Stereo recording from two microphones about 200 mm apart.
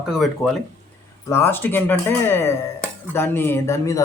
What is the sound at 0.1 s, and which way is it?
Speech, centre (ahead or behind).